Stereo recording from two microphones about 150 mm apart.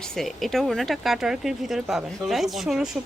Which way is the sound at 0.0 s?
5° left (ahead or behind).